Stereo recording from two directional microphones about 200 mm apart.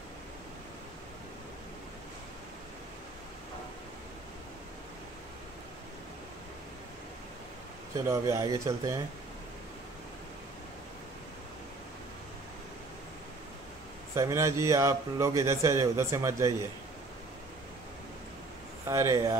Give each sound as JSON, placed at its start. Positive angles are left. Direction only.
{"t": 7.9, "sound": "speech", "side_deg": -15}
{"t": 14.1, "sound": "speech", "side_deg": -15}
{"t": 18.9, "sound": "speech", "side_deg": -15}